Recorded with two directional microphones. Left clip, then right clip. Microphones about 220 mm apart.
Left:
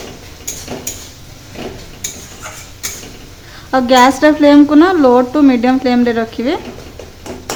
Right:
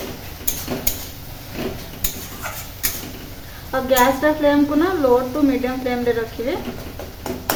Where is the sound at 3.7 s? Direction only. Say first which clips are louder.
Left 7 dB; 50° left (ahead or behind).